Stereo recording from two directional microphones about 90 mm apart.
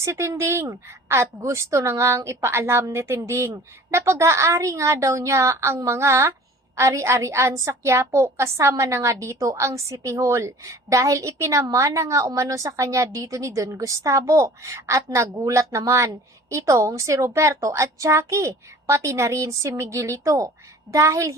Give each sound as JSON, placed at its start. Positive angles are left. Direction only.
{"t": 0.0, "sound": "a woman's voice", "side_deg": -35}